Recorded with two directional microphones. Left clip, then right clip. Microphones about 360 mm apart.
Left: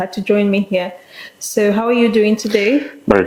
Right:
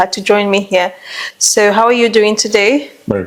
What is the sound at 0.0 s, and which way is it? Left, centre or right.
A woman's voice, right.